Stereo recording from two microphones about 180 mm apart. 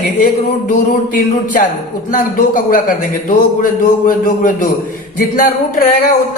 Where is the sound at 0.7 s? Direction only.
45° left (ahead or behind).